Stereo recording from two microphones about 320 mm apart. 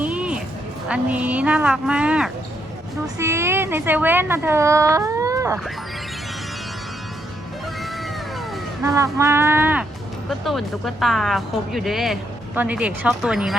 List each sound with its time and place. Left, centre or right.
0.0 s music: centre
0.9 s speech: centre
8.8 s speech: centre